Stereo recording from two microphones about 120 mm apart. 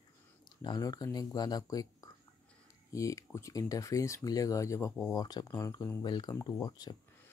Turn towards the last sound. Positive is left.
turn(degrees=30)  # may be behind; listen again after turning